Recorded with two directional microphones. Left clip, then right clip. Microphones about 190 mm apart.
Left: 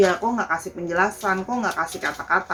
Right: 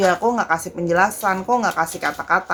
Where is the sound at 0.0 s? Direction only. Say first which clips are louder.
Right 2 dB; 55° right (ahead or behind).